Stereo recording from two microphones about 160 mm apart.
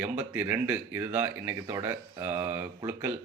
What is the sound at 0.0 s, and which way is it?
Speech, 10° right (ahead or behind).